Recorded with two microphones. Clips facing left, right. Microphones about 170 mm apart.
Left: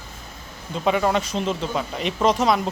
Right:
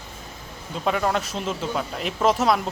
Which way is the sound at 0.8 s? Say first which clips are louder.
Left 3 dB; centre (ahead or behind).